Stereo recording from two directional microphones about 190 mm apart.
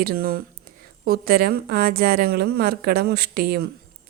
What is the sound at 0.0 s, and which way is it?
A woman's voice, 50° right (ahead or behind).